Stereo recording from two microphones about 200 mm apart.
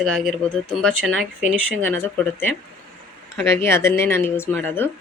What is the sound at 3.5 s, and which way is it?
Speech, 15° left (ahead or behind).